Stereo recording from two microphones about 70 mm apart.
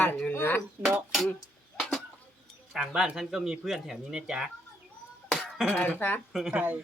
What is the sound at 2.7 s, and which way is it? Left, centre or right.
Speech, centre.